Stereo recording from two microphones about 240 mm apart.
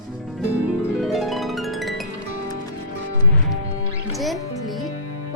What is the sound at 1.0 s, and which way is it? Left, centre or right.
Music, centre.